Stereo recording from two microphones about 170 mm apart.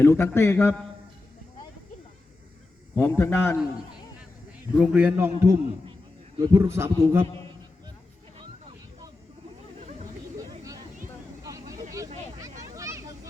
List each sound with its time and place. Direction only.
0.0 s a man's voice: 15° left (ahead or behind)
2.9 s a man's voice: 10° left (ahead or behind)
4.8 s a man's voice: 5° right (ahead or behind)
10.3 s a sound: 20° right (ahead or behind)
11.4 s vehicle: 20° right (ahead or behind)
12.4 s a sound: 20° right (ahead or behind)